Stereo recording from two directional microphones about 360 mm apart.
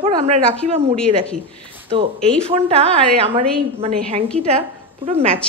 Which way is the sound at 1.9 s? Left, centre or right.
Centre.